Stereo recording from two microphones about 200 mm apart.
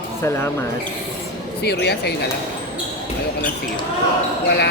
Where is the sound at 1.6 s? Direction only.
55° left (ahead or behind).